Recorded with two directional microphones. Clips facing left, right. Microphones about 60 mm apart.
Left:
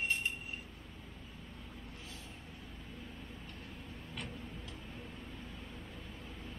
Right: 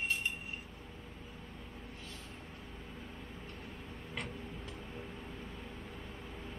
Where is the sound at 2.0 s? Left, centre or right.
Centre.